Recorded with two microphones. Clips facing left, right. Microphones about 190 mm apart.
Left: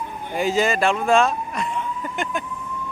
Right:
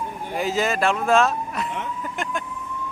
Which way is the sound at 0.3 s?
Centre (ahead or behind).